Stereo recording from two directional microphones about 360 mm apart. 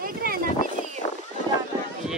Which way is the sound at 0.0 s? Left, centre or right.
Right.